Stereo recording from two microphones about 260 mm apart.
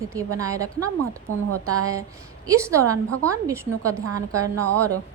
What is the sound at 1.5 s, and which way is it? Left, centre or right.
Speech, right.